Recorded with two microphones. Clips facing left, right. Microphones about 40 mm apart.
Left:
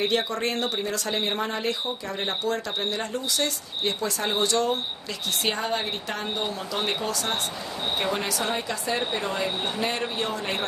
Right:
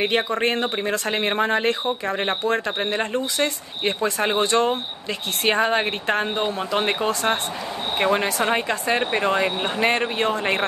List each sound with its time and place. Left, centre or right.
0.0 s speech: right
5.4 s speech: right